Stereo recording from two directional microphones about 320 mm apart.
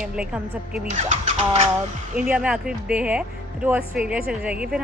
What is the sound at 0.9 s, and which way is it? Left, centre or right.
Speech, right.